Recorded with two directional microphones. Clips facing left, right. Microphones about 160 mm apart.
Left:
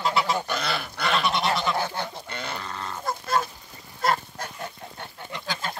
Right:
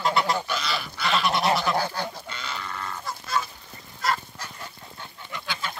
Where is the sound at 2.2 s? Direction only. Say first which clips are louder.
Left 2 dB; 55° left (ahead or behind).